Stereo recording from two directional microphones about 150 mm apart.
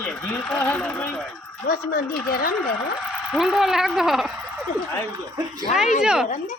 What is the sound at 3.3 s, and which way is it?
Speech, 5° right (ahead or behind).